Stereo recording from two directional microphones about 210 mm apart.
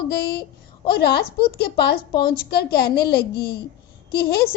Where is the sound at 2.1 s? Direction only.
20° left (ahead or behind).